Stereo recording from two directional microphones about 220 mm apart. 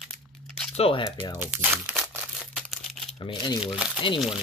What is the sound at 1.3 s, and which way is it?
Speech, 10° right (ahead or behind).